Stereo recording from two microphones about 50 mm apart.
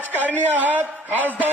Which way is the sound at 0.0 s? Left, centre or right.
Right.